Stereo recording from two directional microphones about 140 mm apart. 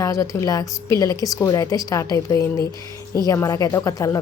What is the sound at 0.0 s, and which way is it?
A woman's voice, 25° left (ahead or behind).